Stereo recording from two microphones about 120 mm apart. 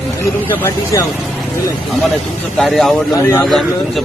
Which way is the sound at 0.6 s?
25° left (ahead or behind).